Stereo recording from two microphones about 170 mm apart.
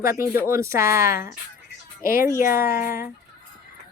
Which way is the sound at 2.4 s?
60° left (ahead or behind).